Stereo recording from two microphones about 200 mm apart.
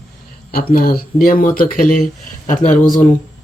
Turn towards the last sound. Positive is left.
turn(degrees=40)  # may be behind; listen again after turning